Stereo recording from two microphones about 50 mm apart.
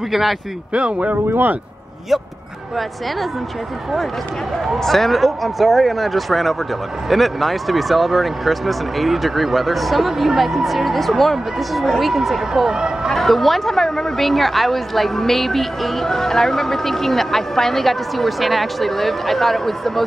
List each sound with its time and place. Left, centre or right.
0.1 s a woman's voice: centre
0.7 s speech: right
1.3 s speech: right
4.8 s a woman's voice: centre
13.1 s a woman's voice: centre